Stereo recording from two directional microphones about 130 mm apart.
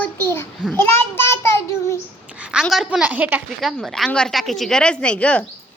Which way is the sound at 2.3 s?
10° right (ahead or behind).